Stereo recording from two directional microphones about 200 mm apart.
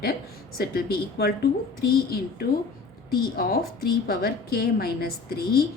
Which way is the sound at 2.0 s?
50° left (ahead or behind).